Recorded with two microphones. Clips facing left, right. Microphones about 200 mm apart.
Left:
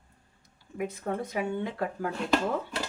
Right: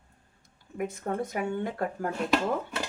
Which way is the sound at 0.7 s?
45° right (ahead or behind).